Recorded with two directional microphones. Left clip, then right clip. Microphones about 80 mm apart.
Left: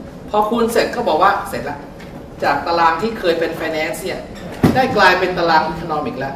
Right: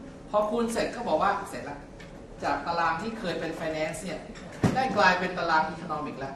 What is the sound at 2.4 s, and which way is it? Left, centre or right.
Speech, centre.